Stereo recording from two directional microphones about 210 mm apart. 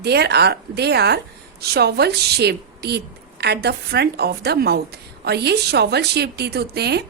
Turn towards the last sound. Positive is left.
turn(degrees=-50)  # may be behind; listen again after turning